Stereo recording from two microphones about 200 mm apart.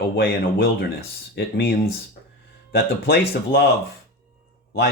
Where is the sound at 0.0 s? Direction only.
50° left (ahead or behind).